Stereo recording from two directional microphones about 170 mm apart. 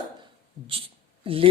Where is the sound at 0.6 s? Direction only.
35° right (ahead or behind).